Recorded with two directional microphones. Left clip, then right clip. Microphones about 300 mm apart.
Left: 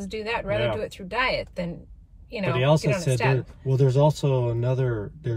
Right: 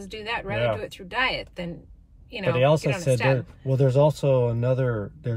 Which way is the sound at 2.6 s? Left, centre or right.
Centre.